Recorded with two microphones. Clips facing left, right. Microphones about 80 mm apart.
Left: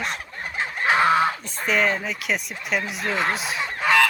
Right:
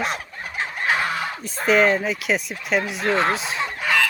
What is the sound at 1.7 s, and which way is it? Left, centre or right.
Speech, centre.